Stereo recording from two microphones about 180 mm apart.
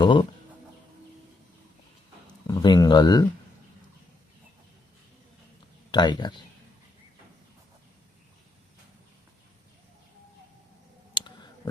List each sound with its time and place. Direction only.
0.0 s speech: 25° left (ahead or behind)
2.5 s speech: 20° left (ahead or behind)
5.9 s speech: 25° left (ahead or behind)
11.1 s a sound: 25° left (ahead or behind)